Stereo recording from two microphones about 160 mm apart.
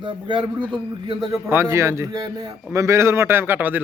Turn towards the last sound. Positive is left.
turn(degrees=-10)  # may be behind; listen again after turning